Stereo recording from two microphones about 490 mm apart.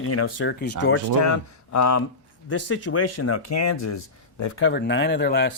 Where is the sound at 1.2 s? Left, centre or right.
Left.